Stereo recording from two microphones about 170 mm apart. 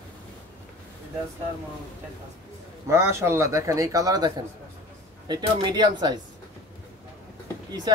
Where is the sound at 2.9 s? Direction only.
15° right (ahead or behind).